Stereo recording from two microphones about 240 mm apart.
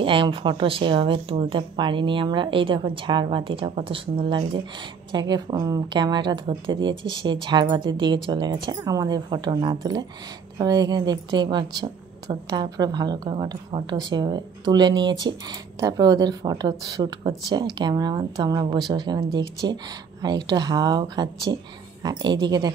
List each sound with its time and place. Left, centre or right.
0.0 s speech: right